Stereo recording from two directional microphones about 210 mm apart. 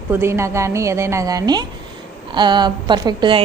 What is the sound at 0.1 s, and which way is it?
A woman's voice, 10° right (ahead or behind).